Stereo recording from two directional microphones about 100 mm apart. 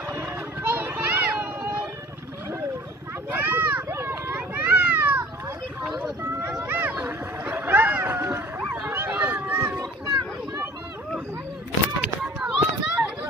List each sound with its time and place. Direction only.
0.1 s music: 25° right (ahead or behind)
3.3 s a sound: 20° right (ahead or behind)
6.6 s a sound: 20° right (ahead or behind)
8.8 s run: 20° right (ahead or behind)
9.8 s children playing: 40° right (ahead or behind)
12.4 s run: 10° right (ahead or behind)